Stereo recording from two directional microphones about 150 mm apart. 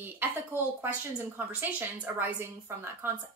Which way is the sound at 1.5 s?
10° right (ahead or behind).